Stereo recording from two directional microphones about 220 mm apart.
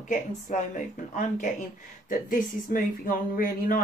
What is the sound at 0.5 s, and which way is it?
Speech, 35° left (ahead or behind).